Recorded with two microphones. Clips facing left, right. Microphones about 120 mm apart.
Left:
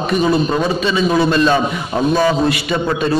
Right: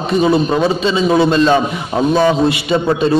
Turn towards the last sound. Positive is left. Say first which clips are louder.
# right 3 dB
turn(degrees=-25)  # may be behind; listen again after turning